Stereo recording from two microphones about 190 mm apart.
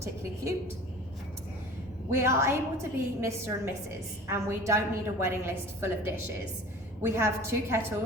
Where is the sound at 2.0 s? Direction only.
15° right (ahead or behind).